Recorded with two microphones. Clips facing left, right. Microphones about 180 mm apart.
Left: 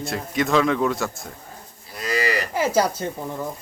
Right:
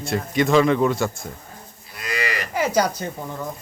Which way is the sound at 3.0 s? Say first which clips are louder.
Left 2 dB; centre (ahead or behind).